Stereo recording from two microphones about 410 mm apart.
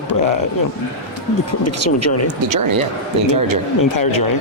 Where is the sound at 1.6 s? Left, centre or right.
Left.